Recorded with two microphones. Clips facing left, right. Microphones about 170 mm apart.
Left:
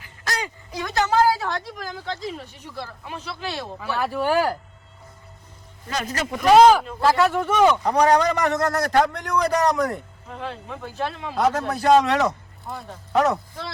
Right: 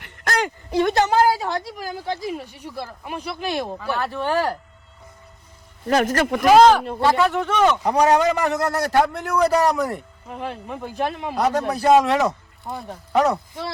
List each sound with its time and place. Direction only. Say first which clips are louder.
0.0 s a sound: right 6 dB; 65° right (ahead or behind)
0.9 s speech: left 2 dB; 15° right (ahead or behind)
3.9 s speech: left 2 dB; 10° left (ahead or behind)
5.9 s speech: right 8 dB; 60° right (ahead or behind)
6.5 s a man's voice: even; 5° left (ahead or behind)
7.9 s a man's voice: right 1 dB; 10° right (ahead or behind)
10.2 s speech: right 3 dB; 15° right (ahead or behind)
11.3 s a man's voice: even; centre (ahead or behind)
12.2 s speech: right 1 dB; 20° right (ahead or behind)
13.1 s a man's voice: right 1 dB; centre (ahead or behind)